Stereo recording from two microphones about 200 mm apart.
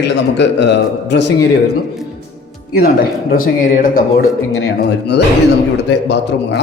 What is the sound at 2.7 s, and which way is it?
A man's voice, 45° left (ahead or behind).